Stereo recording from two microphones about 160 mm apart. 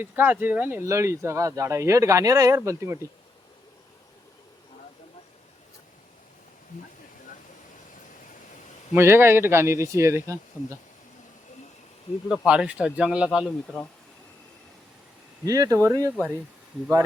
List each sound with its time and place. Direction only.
0.0 s speech: 10° right (ahead or behind)
9.0 s speech: 15° right (ahead or behind)
12.5 s speech: 5° right (ahead or behind)
15.4 s speech: 20° right (ahead or behind)